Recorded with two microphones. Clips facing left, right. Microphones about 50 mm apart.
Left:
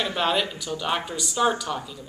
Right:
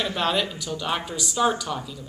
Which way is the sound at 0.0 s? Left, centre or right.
Centre.